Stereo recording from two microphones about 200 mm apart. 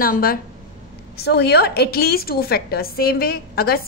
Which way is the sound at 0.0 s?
45° left (ahead or behind).